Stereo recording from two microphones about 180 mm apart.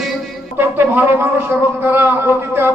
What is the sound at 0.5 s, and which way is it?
Speech, 10° right (ahead or behind).